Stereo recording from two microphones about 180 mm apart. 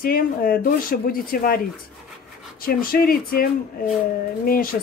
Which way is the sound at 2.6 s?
55° left (ahead or behind).